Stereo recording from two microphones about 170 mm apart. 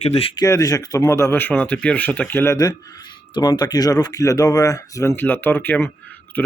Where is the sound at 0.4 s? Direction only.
20° left (ahead or behind).